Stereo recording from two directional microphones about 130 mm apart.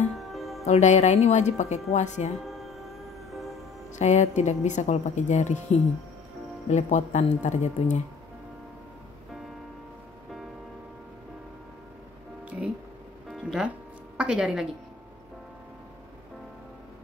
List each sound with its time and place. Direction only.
0.1 s music: centre (ahead or behind)
0.7 s speech: 65° left (ahead or behind)
2.4 s music: centre (ahead or behind)
3.9 s speech: 65° left (ahead or behind)
12.4 s music: 10° right (ahead or behind)
14.1 s a woman's voice: 5° right (ahead or behind)